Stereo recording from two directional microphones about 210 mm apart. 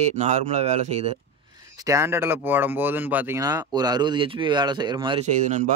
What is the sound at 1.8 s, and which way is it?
Speech, 15° right (ahead or behind).